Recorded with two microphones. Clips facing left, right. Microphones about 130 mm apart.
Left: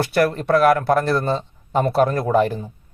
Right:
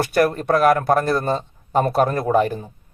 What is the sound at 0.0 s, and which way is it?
A man's voice, 50° right (ahead or behind).